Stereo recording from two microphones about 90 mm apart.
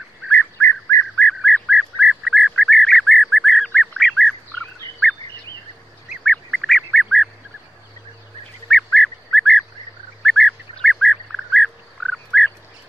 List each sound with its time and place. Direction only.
0.3 s bird: 20° left (ahead or behind)
1.1 s bird: 10° left (ahead or behind)
1.7 s bird: 10° right (ahead or behind)
6.2 s duck: 5° left (ahead or behind)
8.9 s bird: 5° left (ahead or behind)